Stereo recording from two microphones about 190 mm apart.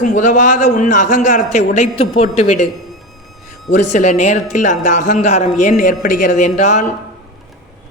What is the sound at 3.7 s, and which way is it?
Speech, 40° left (ahead or behind).